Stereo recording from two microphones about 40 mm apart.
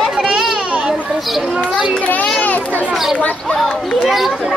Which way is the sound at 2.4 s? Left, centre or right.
Left.